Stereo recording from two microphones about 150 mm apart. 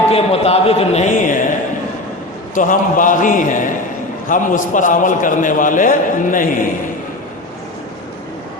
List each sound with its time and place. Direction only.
0.1 s a man's voice: 40° left (ahead or behind)
1.2 s a man's voice: 60° left (ahead or behind)
2.6 s a man's voice: 60° left (ahead or behind)